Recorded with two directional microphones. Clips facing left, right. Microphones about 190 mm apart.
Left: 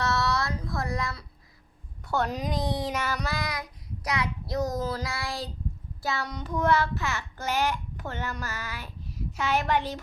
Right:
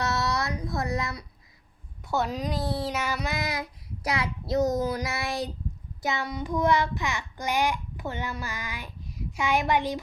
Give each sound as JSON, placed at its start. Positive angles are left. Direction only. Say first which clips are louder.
{"t": 0.0, "sound": "child singing", "louder": "even", "side_deg": -20}
{"t": 2.0, "sound": "a woman's voice", "louder": "even", "side_deg": -5}
{"t": 2.8, "sound": "child singing", "louder": "right 1 dB", "side_deg": -10}
{"t": 3.3, "sound": "child singing", "louder": "right 2 dB", "side_deg": -25}